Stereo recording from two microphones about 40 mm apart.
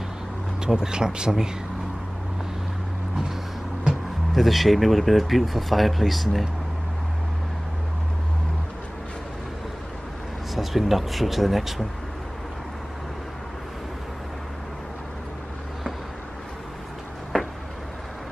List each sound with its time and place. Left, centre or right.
0.7 s speech: centre
4.4 s speech: centre
10.5 s speech: centre